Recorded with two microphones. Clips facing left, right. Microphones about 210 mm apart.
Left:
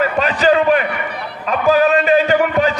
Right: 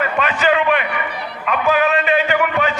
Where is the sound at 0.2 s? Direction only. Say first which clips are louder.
Left 3 dB; 35° left (ahead or behind).